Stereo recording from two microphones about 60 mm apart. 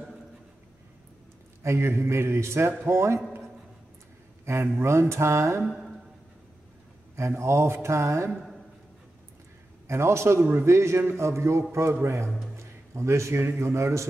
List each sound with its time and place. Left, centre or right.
1.6 s mantra: right
4.5 s mantra: right
7.2 s mantra: right
9.8 s mantra: right
12.5 s a sound: right
13.6 s mantra: right